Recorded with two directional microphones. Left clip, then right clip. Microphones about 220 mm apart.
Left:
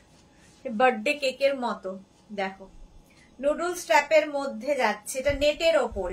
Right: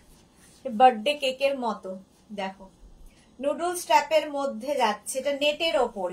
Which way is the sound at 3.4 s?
15° left (ahead or behind).